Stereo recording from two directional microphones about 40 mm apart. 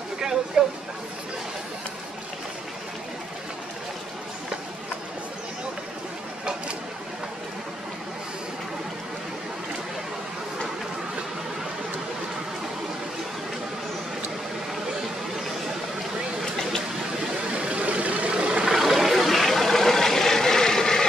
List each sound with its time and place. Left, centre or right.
0.2 s a sound: centre
17.6 s vehicle: right
18.7 s vehicle: centre